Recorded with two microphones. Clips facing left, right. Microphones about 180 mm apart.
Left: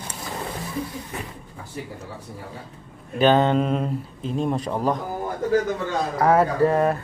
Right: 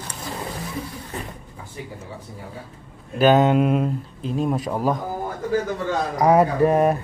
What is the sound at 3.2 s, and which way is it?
Speech, 5° right (ahead or behind).